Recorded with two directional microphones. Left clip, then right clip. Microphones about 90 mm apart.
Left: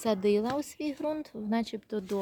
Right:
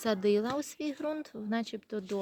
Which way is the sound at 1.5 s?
30° left (ahead or behind).